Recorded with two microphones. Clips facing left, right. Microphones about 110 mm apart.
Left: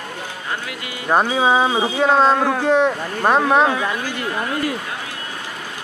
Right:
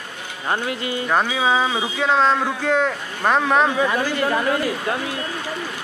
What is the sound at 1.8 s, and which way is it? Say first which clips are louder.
Speech: left 3 dB; 40° left (ahead or behind).